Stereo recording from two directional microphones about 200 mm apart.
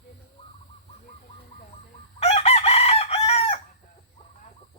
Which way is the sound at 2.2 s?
30° left (ahead or behind).